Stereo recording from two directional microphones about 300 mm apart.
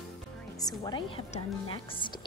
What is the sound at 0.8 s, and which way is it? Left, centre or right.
A woman's voice, centre.